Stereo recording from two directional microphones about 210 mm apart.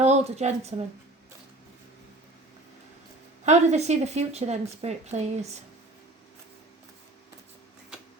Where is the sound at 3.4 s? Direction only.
30° right (ahead or behind).